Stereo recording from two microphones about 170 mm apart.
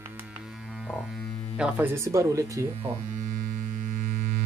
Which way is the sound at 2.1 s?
20° right (ahead or behind).